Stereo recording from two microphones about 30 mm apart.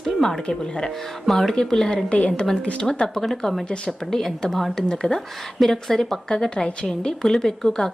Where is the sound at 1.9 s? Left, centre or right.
Left.